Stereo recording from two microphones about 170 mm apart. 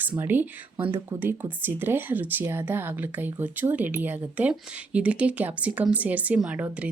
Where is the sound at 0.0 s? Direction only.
10° right (ahead or behind).